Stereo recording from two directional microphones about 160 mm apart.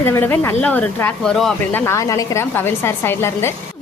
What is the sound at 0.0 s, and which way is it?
A woman's voice, 15° left (ahead or behind).